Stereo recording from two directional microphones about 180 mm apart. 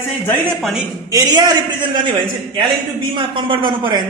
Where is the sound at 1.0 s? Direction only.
20° right (ahead or behind).